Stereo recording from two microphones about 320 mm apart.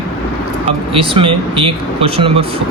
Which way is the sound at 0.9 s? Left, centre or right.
Centre.